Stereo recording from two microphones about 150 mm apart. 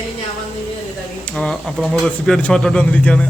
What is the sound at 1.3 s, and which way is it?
Speech, 5° left (ahead or behind).